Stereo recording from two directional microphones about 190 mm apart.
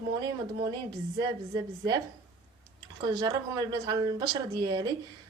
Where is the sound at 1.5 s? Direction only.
20° right (ahead or behind).